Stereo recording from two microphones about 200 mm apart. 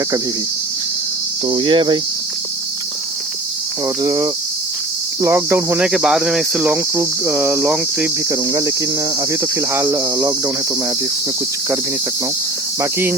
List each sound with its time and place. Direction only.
1.5 s cricket: 25° right (ahead or behind)
4.0 s cricket: 15° right (ahead or behind)
8.3 s cricket: 15° right (ahead or behind)
12.8 s cricket: 10° right (ahead or behind)